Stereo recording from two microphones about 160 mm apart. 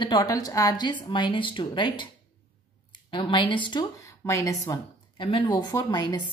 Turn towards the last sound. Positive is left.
turn(degrees=25)  # may be behind; listen again after turning